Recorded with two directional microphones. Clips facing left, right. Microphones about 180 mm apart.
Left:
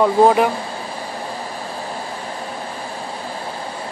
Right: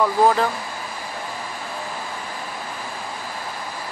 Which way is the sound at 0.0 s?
20° left (ahead or behind).